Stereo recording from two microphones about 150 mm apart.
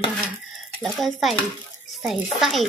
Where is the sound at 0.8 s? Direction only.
Centre (ahead or behind).